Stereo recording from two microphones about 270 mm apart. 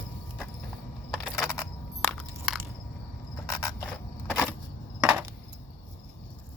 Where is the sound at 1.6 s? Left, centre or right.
Centre.